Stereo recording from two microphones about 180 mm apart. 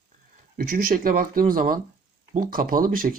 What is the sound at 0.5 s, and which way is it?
Speech, 50° right (ahead or behind).